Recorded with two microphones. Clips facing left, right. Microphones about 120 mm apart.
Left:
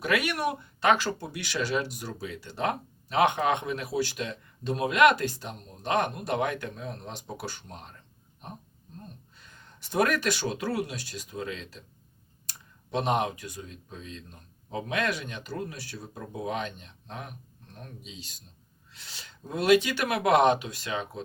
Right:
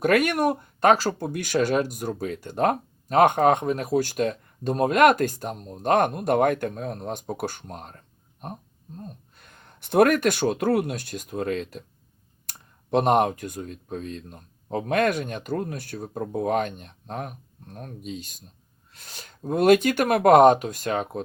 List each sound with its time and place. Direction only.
0.0 s speech: 50° right (ahead or behind)